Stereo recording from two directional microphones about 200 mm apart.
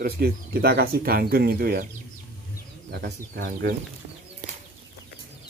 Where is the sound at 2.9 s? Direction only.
55° right (ahead or behind).